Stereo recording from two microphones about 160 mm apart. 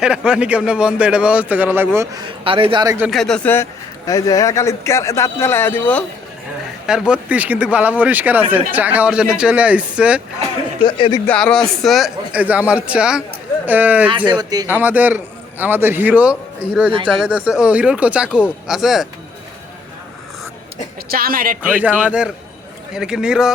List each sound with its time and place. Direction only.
0.0 s a man's voice: 5° right (ahead or behind)
2.2 s a man's voice: 35° right (ahead or behind)
3.1 s a man's voice: centre (ahead or behind)
7.1 s a man's voice: 10° right (ahead or behind)
10.8 s speech: 30° left (ahead or behind)
11.3 s a man's voice: 5° left (ahead or behind); by 14.1 s 10° right (ahead or behind)
14.3 s speech: 25° right (ahead or behind)
14.7 s a man's voice: 10° right (ahead or behind)
21.1 s speech: 65° right (ahead or behind)
21.6 s a man's voice: 10° right (ahead or behind)